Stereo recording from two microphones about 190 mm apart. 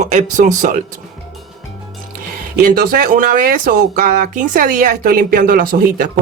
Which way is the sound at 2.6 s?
50° right (ahead or behind).